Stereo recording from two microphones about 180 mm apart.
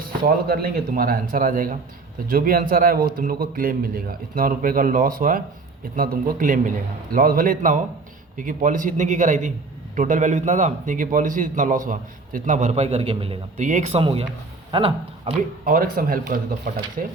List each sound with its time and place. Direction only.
0.3 s a man's voice: 55° right (ahead or behind); by 13.4 s 30° right (ahead or behind)
13.6 s speech: 45° right (ahead or behind)
15.6 s a man's voice: 55° right (ahead or behind)